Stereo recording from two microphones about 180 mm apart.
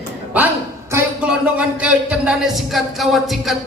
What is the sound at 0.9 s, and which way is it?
A man's voice, 10° right (ahead or behind).